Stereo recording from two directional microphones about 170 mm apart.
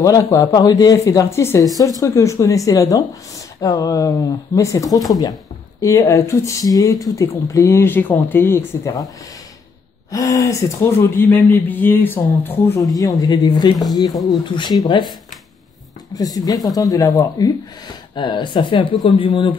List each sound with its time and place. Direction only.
0.0 s speech: 20° left (ahead or behind)
10.1 s speech: 20° left (ahead or behind)
16.2 s speech: 20° left (ahead or behind)